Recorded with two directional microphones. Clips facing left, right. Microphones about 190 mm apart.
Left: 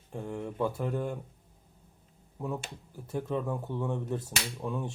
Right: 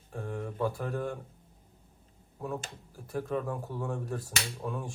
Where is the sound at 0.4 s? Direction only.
25° left (ahead or behind).